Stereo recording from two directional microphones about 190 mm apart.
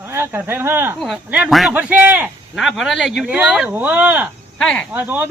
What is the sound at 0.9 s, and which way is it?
Speech, centre (ahead or behind).